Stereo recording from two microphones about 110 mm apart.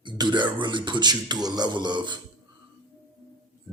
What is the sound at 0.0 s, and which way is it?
Speech, 45° right (ahead or behind).